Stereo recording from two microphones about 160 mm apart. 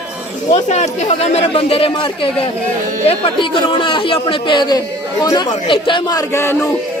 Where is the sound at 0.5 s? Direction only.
45° left (ahead or behind); by 6.6 s 15° left (ahead or behind).